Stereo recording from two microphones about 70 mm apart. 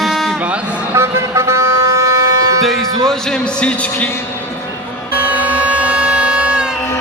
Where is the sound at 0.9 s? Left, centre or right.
Right.